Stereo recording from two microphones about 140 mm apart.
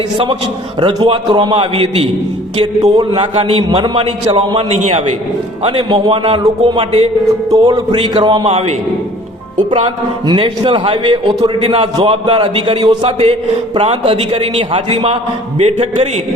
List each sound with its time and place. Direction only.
0.8 s a man's voice: 35° right (ahead or behind)
7.5 s a man's voice: 30° right (ahead or behind)
8.4 s a man's voice: 50° right (ahead or behind)
10.2 s a man's voice: 35° right (ahead or behind)